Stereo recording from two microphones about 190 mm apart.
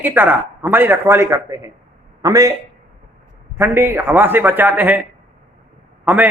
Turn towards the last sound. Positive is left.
turn(degrees=-10)  # may be behind; listen again after turning